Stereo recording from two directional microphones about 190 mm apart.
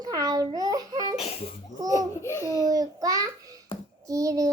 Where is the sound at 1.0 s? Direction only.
30° left (ahead or behind).